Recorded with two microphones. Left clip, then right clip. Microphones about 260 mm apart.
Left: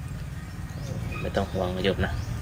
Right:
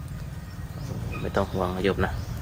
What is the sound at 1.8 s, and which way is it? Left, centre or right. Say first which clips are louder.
Speech: right 1 dB; centre.